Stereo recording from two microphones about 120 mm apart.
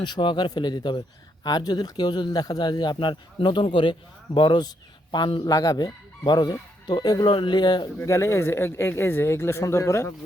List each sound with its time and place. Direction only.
0.0 s speech: 40° left (ahead or behind)
8.0 s speech: 25° left (ahead or behind)